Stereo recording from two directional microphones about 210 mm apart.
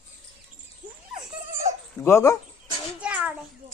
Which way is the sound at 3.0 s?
5° right (ahead or behind).